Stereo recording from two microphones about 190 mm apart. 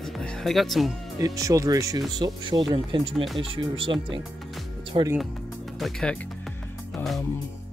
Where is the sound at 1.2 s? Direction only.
15° right (ahead or behind).